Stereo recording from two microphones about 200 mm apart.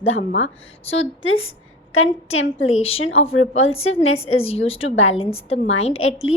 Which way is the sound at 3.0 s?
90° left.